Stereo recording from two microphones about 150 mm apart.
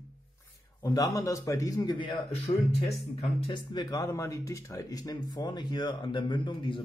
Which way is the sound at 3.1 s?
40° left (ahead or behind).